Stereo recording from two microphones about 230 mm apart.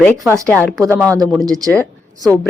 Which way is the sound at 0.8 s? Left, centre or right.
Centre.